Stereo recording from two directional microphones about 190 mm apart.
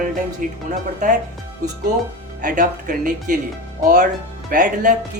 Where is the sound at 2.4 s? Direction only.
45° right (ahead or behind).